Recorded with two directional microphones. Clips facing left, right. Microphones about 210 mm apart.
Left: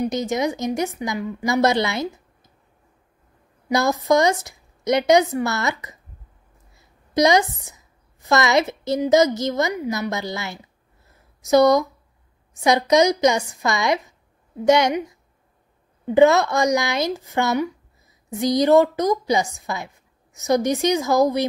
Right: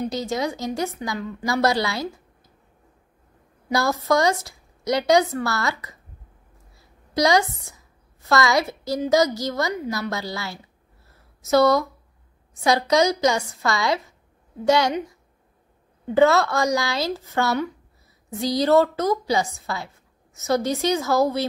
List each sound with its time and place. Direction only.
0.0 s a woman's voice: 20° left (ahead or behind)
3.6 s a woman's voice: 20° left (ahead or behind)
7.2 s a woman's voice: 20° left (ahead or behind)
16.2 s a woman's voice: 20° left (ahead or behind)